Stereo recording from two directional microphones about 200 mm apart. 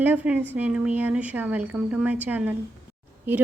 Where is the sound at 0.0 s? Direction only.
10° right (ahead or behind).